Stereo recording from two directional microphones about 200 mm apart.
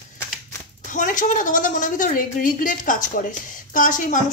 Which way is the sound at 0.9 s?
40° left (ahead or behind).